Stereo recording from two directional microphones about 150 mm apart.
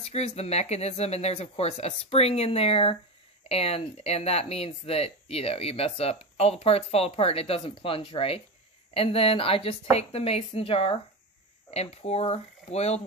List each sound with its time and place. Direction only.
0.1 s speech: 45° left (ahead or behind)